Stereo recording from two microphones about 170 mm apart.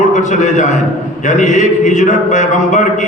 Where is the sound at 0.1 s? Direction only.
45° left (ahead or behind).